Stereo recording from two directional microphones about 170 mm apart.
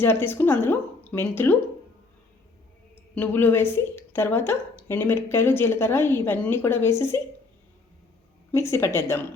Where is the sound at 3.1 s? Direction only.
10° left (ahead or behind).